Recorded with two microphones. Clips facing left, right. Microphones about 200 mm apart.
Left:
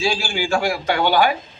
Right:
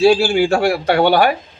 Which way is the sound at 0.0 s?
65° right (ahead or behind).